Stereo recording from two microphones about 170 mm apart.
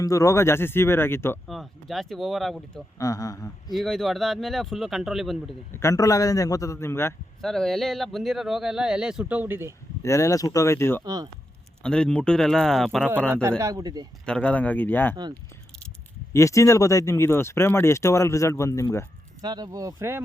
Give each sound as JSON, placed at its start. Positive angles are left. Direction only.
{"t": 0.0, "sound": "speech", "side_deg": 20}
{"t": 1.5, "sound": "speech", "side_deg": 0}
{"t": 3.0, "sound": "a man's voice", "side_deg": 20}
{"t": 3.7, "sound": "speech", "side_deg": 0}
{"t": 5.7, "sound": "a man's voice", "side_deg": 20}
{"t": 7.4, "sound": "speech", "side_deg": 0}
{"t": 10.0, "sound": "speech", "side_deg": 20}
{"t": 11.0, "sound": "speech", "side_deg": -20}
{"t": 11.8, "sound": "speech", "side_deg": 5}
{"t": 13.6, "sound": "speech", "side_deg": -20}
{"t": 14.3, "sound": "speech", "side_deg": 5}
{"t": 16.3, "sound": "speech", "side_deg": 15}
{"t": 19.4, "sound": "speech", "side_deg": -25}